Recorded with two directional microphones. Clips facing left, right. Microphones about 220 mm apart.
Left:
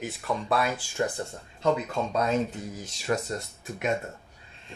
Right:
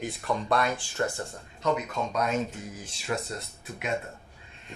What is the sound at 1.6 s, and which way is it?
Speech, 30° left (ahead or behind).